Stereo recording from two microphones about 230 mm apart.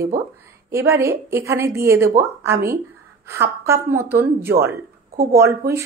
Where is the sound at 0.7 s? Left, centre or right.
Centre.